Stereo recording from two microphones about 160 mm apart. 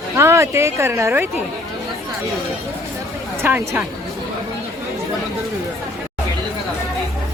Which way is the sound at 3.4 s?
15° right (ahead or behind).